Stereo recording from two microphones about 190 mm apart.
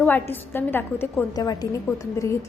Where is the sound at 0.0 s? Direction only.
10° left (ahead or behind).